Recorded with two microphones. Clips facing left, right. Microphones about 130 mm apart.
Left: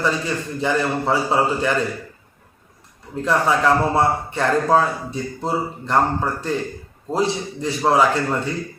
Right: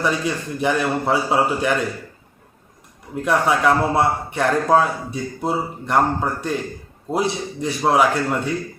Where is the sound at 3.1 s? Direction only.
10° right (ahead or behind).